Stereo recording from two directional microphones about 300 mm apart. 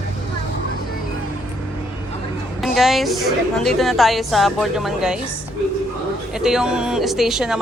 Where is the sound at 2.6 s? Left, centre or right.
Centre.